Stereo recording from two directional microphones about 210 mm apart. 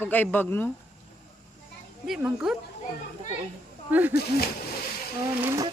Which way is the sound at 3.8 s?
10° right (ahead or behind).